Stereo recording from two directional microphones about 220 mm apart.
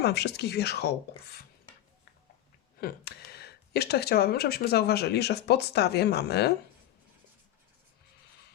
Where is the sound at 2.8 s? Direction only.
45° left (ahead or behind).